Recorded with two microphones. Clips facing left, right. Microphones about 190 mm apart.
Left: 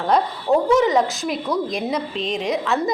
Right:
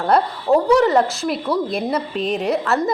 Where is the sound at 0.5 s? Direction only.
Centre (ahead or behind).